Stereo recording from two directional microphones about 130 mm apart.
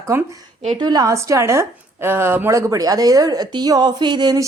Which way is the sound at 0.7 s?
30° right (ahead or behind).